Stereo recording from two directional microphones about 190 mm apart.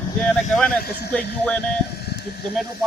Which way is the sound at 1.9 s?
55° left (ahead or behind).